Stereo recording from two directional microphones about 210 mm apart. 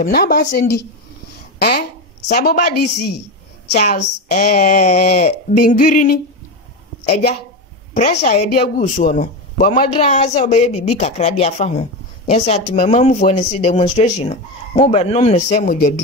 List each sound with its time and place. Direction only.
0.0 s a woman's voice: 45° left (ahead or behind)
3.7 s a woman's voice: 35° left (ahead or behind)
7.9 s speech: 35° left (ahead or behind)